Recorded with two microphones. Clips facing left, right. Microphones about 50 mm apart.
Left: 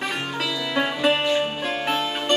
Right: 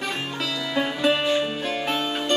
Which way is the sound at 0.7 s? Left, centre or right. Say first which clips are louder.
Left 1 dB; centre.